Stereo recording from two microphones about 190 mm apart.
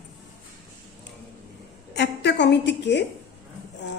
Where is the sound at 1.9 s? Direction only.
65° left (ahead or behind).